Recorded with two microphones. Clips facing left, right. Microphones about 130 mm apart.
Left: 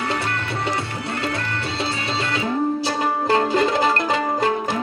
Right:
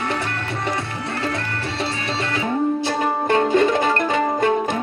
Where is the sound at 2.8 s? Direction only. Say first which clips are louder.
Right 1 dB; 30° left (ahead or behind).